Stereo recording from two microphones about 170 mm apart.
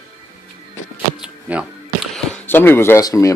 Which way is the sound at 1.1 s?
5° right (ahead or behind).